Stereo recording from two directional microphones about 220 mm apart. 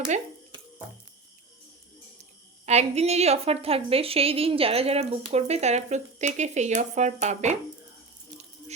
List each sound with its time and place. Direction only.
2.6 s a woman's voice: 30° right (ahead or behind)